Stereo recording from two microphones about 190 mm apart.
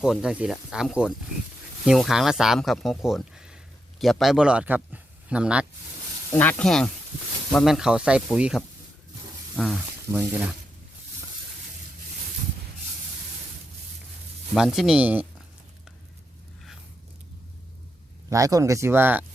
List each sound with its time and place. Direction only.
0.0 s speech: 5° right (ahead or behind)
6.3 s speech: 10° left (ahead or behind)
14.5 s speech: centre (ahead or behind)
18.3 s speech: 20° right (ahead or behind)